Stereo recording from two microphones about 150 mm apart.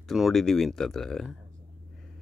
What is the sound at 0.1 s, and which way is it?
Speech, centre (ahead or behind).